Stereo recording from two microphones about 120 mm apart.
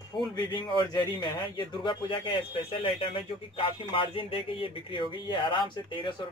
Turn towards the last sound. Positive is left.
turn(degrees=45)  # may be behind; listen again after turning